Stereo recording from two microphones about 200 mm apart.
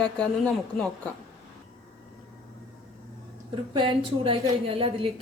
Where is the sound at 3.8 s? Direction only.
25° right (ahead or behind).